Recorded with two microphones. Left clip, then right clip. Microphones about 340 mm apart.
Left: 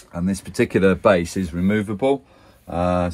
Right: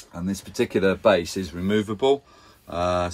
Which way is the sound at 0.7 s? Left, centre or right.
Centre.